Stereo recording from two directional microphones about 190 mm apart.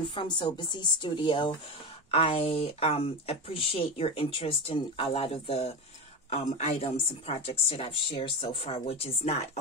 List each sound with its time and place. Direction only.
0.1 s a woman's voice: 25° left (ahead or behind)